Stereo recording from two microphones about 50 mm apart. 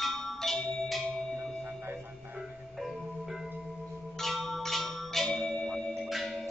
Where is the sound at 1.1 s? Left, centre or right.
Centre.